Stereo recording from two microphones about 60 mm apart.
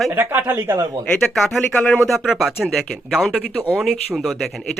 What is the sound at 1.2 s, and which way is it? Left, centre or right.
Speech, centre.